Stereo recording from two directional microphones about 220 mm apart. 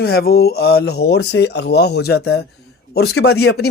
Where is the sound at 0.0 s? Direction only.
45° left (ahead or behind).